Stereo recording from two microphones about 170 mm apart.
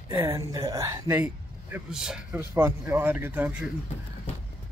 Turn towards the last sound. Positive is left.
turn(degrees=-10)  # may be behind; listen again after turning